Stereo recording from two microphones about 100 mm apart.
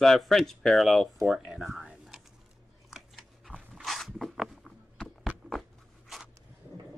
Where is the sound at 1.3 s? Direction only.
Centre (ahead or behind).